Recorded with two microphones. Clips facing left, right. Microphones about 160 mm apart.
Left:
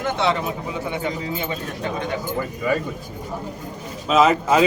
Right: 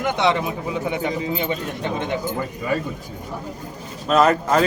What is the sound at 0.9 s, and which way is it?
Speech, 20° right (ahead or behind).